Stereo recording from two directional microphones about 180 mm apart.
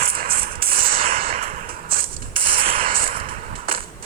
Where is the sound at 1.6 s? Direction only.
55° right (ahead or behind).